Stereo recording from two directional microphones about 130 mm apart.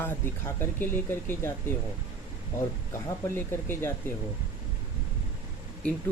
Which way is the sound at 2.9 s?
20° left (ahead or behind).